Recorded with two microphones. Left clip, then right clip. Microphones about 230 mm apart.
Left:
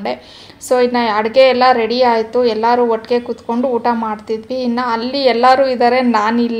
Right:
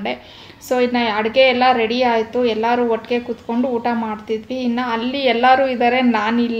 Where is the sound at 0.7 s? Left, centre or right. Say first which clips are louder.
Left 4 dB; left.